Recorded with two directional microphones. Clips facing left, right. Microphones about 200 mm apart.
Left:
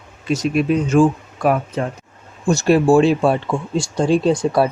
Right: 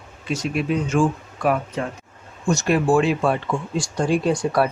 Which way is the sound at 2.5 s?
30° left (ahead or behind).